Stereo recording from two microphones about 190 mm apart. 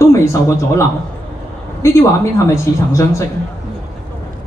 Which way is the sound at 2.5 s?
15° left (ahead or behind).